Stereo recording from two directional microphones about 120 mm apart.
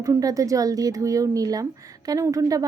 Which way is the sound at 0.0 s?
30° right (ahead or behind).